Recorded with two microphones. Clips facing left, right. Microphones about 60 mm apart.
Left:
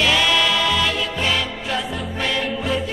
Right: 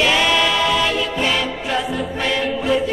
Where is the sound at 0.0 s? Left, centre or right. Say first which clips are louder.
Right 2 dB; centre.